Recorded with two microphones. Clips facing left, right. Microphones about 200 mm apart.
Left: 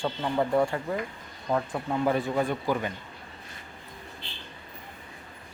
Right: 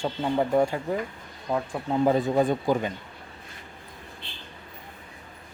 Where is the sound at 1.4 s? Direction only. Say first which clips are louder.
Even; 5° right (ahead or behind).